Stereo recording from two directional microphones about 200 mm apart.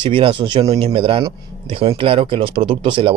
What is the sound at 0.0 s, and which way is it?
Speech, 25° right (ahead or behind).